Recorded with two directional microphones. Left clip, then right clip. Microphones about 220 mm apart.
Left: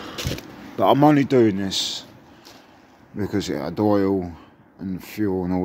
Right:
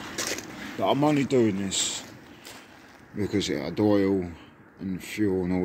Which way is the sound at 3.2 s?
25° left (ahead or behind).